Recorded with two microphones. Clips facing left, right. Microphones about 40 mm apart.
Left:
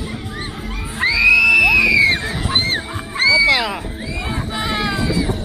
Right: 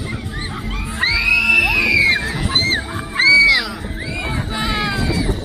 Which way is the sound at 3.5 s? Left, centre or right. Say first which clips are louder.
Even; left.